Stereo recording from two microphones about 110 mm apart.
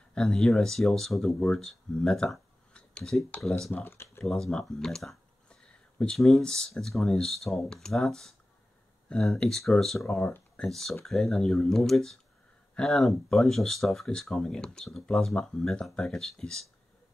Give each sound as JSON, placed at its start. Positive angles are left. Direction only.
{"t": 0.1, "sound": "speech", "side_deg": 5}
{"t": 3.7, "sound": "speech", "side_deg": 20}
{"t": 4.2, "sound": "speech", "side_deg": 5}
{"t": 10.1, "sound": "speech", "side_deg": 20}
{"t": 10.6, "sound": "speech", "side_deg": 5}